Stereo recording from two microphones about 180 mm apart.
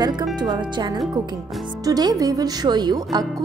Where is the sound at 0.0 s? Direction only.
25° right (ahead or behind).